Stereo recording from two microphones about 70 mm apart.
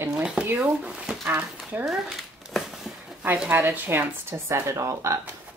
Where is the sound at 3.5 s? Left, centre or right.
Right.